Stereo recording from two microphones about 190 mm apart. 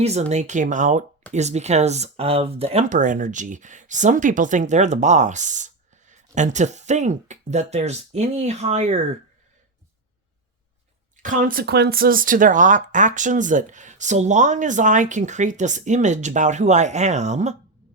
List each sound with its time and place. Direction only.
0.0 s speech: 35° right (ahead or behind)
11.2 s speech: 45° right (ahead or behind)